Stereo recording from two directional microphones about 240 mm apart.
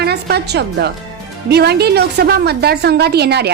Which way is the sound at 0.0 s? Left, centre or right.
Right.